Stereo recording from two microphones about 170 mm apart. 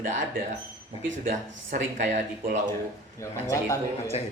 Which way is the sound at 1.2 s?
50° right (ahead or behind).